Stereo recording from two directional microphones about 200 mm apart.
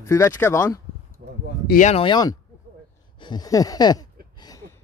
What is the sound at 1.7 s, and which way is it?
Speech, 35° left (ahead or behind).